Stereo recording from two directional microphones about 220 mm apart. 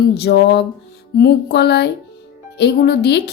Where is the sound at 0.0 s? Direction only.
50° left (ahead or behind).